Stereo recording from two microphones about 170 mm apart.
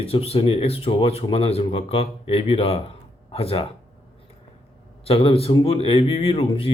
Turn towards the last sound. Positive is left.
turn(degrees=35)  # may be behind; listen again after turning